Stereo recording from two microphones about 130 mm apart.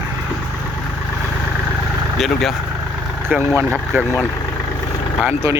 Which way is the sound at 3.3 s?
15° right (ahead or behind).